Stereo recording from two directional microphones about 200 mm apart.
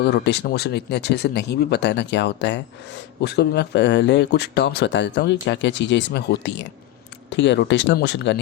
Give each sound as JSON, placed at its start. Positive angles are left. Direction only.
{"t": 0.0, "sound": "speech", "side_deg": 55}